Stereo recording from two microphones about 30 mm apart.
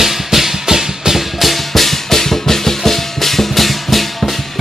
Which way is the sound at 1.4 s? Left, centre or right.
Centre.